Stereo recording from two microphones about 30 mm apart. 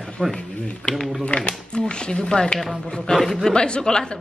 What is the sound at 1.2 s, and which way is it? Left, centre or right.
Speech, left.